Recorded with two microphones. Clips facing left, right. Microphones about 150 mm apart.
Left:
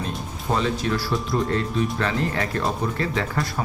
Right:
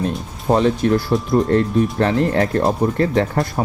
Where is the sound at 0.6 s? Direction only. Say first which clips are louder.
Right 8 dB; 55° right (ahead or behind).